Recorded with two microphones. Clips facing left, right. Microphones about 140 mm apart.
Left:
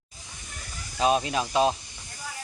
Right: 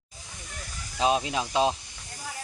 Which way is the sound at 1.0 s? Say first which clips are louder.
Left 1 dB; 15° right (ahead or behind).